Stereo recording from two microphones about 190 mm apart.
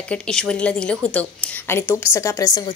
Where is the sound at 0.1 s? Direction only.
5° left (ahead or behind).